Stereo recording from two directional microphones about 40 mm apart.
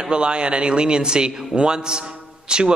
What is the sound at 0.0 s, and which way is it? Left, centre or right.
A man's voice, right.